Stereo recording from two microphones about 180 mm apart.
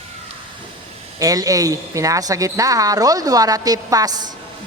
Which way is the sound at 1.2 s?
20° right (ahead or behind).